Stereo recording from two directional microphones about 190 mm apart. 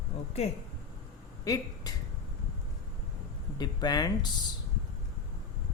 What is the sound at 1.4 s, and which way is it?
Speech, 15° left (ahead or behind).